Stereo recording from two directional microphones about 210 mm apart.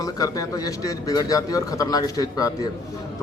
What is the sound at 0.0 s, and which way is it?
A man's voice, 15° left (ahead or behind).